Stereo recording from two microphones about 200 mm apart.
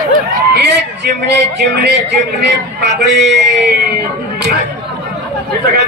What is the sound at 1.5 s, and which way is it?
A man's voice, 55° right (ahead or behind).